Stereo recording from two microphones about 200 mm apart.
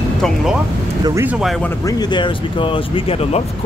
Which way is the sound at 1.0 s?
10° right (ahead or behind).